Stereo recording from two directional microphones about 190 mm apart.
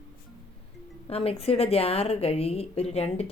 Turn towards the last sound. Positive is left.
turn(degrees=35)  # may be behind; listen again after turning